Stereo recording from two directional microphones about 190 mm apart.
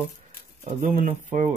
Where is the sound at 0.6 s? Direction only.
45° right (ahead or behind).